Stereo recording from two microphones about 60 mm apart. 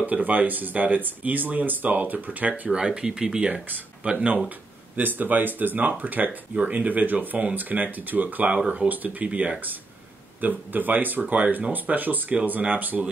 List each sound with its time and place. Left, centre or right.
0.0 s speech: right
2.7 s speech: centre
3.6 s speech: right
4.5 s speech: right